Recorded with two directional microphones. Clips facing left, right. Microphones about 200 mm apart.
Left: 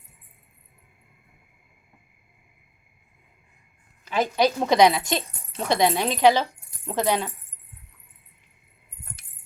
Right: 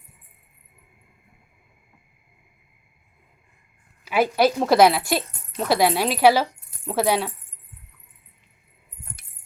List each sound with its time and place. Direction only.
4.0 s speech: 10° right (ahead or behind)